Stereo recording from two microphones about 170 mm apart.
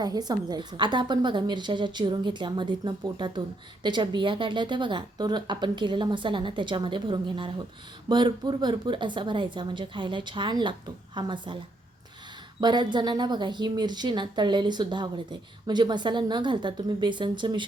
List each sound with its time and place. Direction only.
0.0 s a woman's voice: 25° right (ahead or behind)
12.5 s a woman's voice: 25° right (ahead or behind)